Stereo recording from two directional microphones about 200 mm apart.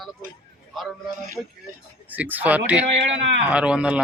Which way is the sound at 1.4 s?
10° right (ahead or behind).